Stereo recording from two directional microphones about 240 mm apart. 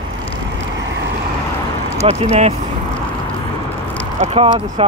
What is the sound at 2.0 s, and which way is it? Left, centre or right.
Speech, right.